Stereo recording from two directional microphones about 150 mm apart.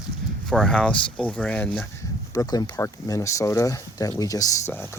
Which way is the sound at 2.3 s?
25° left (ahead or behind).